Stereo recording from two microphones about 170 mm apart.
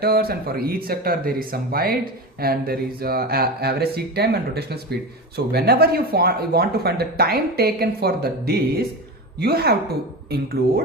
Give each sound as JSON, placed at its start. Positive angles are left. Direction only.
{"t": 0.0, "sound": "speech", "side_deg": -65}